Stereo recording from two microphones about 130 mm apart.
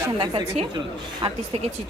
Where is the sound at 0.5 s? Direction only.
40° right (ahead or behind).